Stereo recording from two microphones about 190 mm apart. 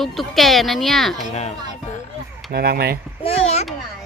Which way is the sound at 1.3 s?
35° left (ahead or behind).